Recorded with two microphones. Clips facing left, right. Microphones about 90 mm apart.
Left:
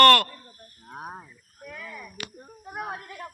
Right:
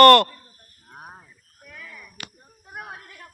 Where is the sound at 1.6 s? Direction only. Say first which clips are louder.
Left 4 dB; 5° left (ahead or behind).